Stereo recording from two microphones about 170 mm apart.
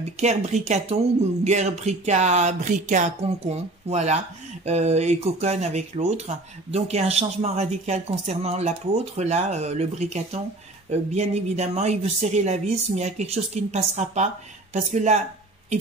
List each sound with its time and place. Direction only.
0.2 s speech: 40° right (ahead or behind)